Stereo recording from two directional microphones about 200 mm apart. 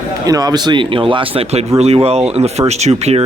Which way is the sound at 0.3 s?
20° right (ahead or behind).